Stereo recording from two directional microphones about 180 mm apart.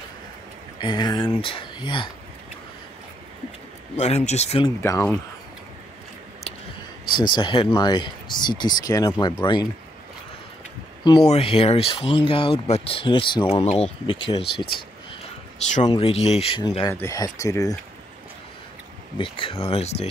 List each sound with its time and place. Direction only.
0.7 s speech: 25° left (ahead or behind)
3.9 s speech: 40° left (ahead or behind)
4.6 s speech: 15° left (ahead or behind)
7.2 s speech: 25° left (ahead or behind)
11.2 s speech: 35° left (ahead or behind)
15.9 s speech: 30° left (ahead or behind)
16.9 s speech: 15° left (ahead or behind)
19.1 s speech: 30° left (ahead or behind)